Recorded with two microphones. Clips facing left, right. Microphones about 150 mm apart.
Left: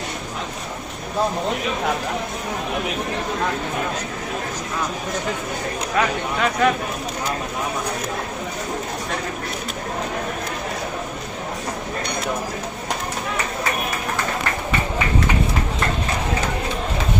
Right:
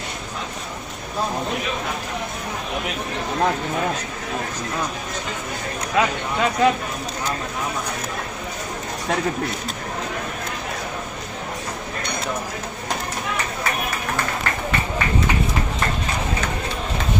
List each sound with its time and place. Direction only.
6.0 s speech: 20° right (ahead or behind)